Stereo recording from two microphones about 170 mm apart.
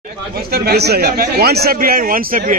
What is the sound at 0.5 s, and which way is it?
A man's voice, 70° right (ahead or behind).